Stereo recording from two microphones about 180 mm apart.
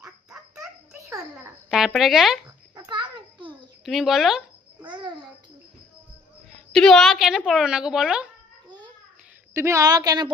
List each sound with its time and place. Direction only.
0.3 s a sound: centre (ahead or behind)
1.7 s speech: centre (ahead or behind)
2.8 s a sound: 25° right (ahead or behind)
3.8 s a woman's voice: centre (ahead or behind)
4.8 s babbling: 25° right (ahead or behind)
6.7 s a woman's voice: centre (ahead or behind)
9.6 s a woman's voice: 15° right (ahead or behind)